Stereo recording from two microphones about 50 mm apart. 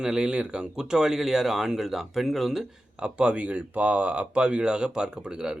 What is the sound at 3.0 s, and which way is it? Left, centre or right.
Speech, right.